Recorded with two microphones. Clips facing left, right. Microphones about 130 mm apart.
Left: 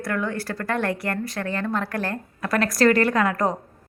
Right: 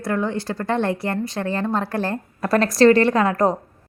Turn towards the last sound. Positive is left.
turn(degrees=-30)  # may be behind; listen again after turning